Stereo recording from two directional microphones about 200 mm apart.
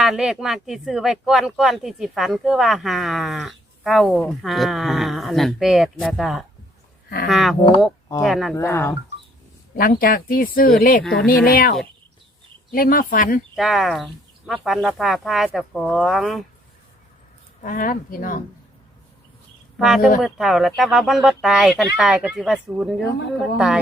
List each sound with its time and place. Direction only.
0.0 s speech: 5° right (ahead or behind)
8.5 s speech: 10° left (ahead or behind)
9.7 s speech: 45° left (ahead or behind)
12.7 s speech: 45° left (ahead or behind)
13.6 s speech: centre (ahead or behind)
17.6 s speech: 40° left (ahead or behind)
19.8 s speech: centre (ahead or behind)